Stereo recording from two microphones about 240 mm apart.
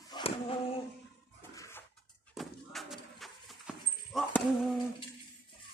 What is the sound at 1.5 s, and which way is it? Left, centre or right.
Toilet flush, centre.